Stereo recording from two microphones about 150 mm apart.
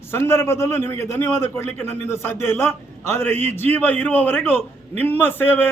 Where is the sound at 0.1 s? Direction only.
15° left (ahead or behind).